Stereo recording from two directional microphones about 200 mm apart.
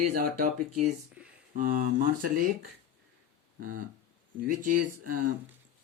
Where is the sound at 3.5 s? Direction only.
45° right (ahead or behind).